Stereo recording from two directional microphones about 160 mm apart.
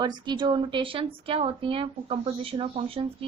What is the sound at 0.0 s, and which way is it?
A woman's voice, 25° right (ahead or behind).